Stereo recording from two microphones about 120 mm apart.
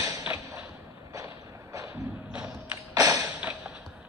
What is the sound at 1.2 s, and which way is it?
Vehicle, 30° right (ahead or behind).